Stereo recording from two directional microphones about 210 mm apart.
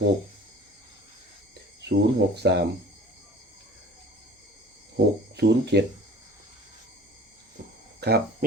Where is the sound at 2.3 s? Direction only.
55° right (ahead or behind).